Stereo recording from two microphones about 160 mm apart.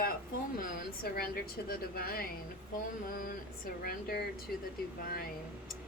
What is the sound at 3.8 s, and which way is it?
Speech, 70° left (ahead or behind).